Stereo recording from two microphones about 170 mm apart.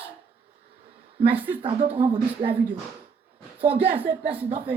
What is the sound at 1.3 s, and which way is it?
Speech, 10° right (ahead or behind).